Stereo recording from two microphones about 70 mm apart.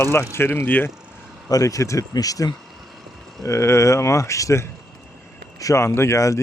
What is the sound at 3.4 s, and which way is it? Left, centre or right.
Speech, left.